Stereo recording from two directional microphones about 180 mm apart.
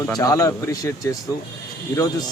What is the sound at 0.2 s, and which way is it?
Speech, 20° left (ahead or behind).